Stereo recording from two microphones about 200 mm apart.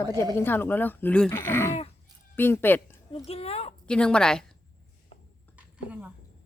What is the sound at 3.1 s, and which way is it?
Speech, 30° left (ahead or behind).